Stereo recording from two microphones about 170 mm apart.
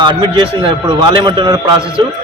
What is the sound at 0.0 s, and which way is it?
A man's voice, 25° right (ahead or behind).